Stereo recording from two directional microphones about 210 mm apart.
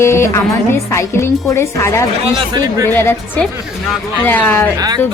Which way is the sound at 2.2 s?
20° right (ahead or behind).